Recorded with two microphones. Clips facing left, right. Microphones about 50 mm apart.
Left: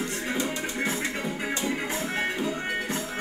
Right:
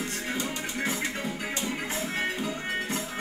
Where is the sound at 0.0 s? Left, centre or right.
Left.